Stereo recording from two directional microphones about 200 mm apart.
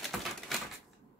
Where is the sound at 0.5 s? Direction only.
Centre (ahead or behind).